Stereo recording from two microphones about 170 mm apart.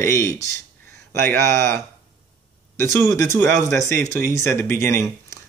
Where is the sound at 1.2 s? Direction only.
15° left (ahead or behind).